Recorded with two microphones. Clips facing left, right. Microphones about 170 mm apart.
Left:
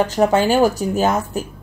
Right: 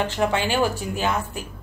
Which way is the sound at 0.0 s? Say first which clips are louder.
Left 7 dB; 40° left (ahead or behind).